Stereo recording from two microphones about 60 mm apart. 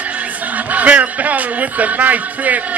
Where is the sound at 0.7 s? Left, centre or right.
Right.